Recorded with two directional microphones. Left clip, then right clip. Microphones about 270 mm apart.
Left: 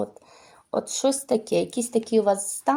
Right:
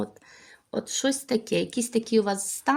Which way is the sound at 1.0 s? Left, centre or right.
Right.